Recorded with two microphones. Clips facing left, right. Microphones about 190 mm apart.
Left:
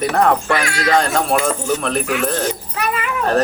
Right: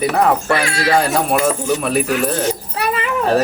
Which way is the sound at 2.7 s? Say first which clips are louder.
Right 2 dB; 30° right (ahead or behind).